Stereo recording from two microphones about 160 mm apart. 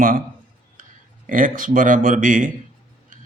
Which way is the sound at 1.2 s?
60° right (ahead or behind).